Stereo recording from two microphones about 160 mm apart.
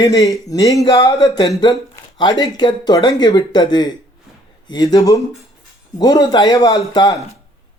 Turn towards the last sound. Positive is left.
turn(degrees=25)  # may be behind; listen again after turning